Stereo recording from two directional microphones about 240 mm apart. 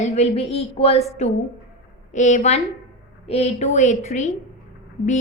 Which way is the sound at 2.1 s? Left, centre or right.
Left.